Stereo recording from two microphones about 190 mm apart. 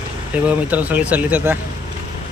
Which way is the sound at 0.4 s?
10° right (ahead or behind).